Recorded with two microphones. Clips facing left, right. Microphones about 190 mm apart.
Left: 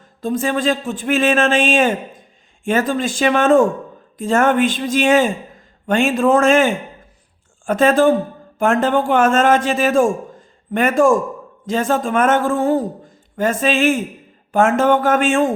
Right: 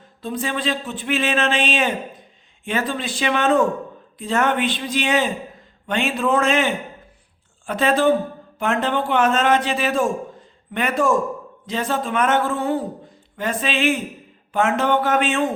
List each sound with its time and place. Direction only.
0.2 s speech: 45° left (ahead or behind)